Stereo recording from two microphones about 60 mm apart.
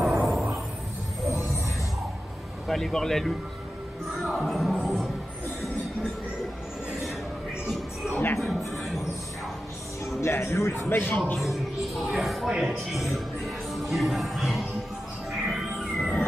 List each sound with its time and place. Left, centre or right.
0.0 s music: centre
2.7 s speech: centre
7.6 s speech: centre
8.1 s speech: left
8.5 s speech: centre
10.2 s speech: left
11.3 s speech: centre
12.4 s speech: centre
12.8 s speech: centre
15.4 s music: centre